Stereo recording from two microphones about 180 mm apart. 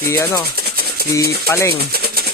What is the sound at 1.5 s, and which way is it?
Speech, 15° left (ahead or behind).